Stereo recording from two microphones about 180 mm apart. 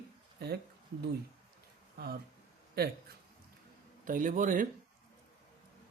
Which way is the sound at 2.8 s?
60° right (ahead or behind).